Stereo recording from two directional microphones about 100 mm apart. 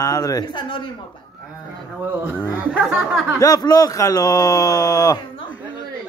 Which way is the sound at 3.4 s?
35° left (ahead or behind).